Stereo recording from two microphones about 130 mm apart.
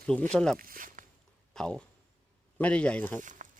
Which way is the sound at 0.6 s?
90° right.